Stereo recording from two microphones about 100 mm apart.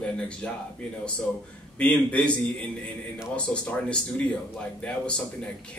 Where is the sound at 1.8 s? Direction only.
10° left (ahead or behind).